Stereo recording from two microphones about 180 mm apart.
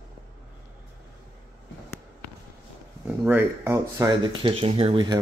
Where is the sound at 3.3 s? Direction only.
10° right (ahead or behind).